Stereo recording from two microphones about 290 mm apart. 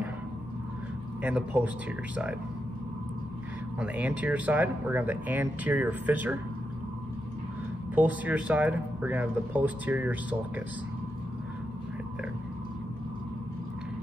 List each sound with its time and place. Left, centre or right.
1.2 s speech: centre
3.8 s speech: centre
7.9 s speech: centre